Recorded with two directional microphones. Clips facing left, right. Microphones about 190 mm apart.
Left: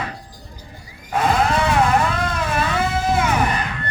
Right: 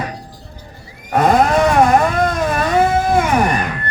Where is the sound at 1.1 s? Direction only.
50° right (ahead or behind).